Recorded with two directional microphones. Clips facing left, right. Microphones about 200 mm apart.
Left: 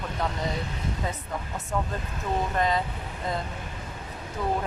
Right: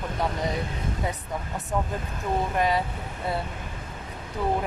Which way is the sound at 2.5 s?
10° right (ahead or behind).